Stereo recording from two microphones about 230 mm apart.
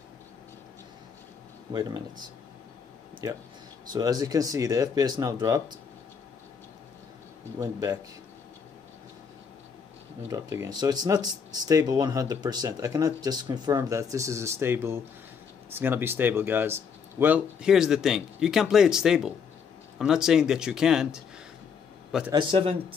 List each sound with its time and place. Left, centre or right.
1.7 s speech: centre
3.9 s speech: centre
7.5 s speech: centre
10.2 s speech: centre
22.3 s speech: right